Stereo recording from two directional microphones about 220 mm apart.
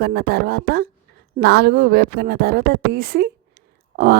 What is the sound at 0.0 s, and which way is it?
Speech, 45° right (ahead or behind).